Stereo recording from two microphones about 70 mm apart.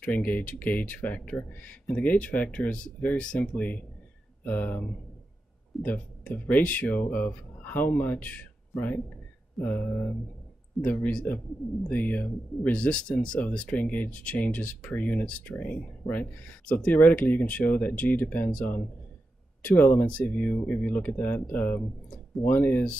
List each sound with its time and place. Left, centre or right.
0.0 s speech: left